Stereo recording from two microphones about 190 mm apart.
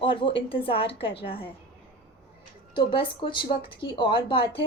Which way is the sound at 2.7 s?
25° left (ahead or behind).